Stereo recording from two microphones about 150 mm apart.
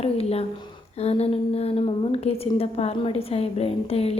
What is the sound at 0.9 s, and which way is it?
A woman's voice, 45° left (ahead or behind).